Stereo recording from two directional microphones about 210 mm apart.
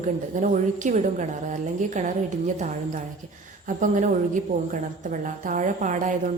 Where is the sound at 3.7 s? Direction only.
40° right (ahead or behind).